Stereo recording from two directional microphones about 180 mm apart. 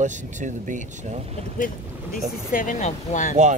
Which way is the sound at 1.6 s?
50° left (ahead or behind).